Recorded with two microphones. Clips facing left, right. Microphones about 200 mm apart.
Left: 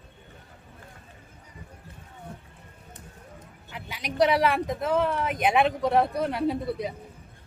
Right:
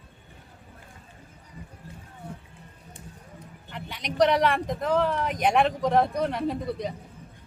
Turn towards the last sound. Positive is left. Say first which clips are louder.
# left 1 dB
turn(degrees=5)  # may be behind; listen again after turning